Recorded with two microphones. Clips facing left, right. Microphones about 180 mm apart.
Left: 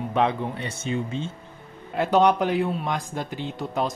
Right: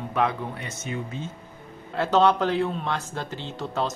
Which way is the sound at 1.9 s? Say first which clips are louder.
Left 1 dB; 15° left (ahead or behind).